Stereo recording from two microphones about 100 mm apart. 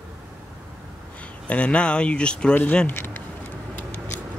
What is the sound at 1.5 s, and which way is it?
Speech, 10° left (ahead or behind).